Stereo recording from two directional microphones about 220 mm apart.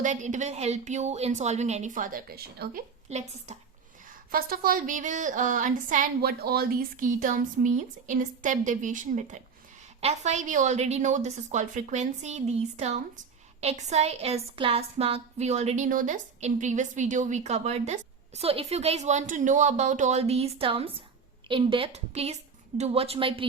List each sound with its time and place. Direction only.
0.0 s a woman's voice: 35° right (ahead or behind)
3.1 s a woman's voice: 30° right (ahead or behind)
4.3 s a woman's voice: 40° right (ahead or behind); by 23.5 s 25° right (ahead or behind)